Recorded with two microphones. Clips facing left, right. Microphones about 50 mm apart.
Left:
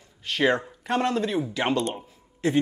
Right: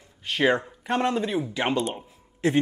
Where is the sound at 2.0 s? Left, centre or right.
Right.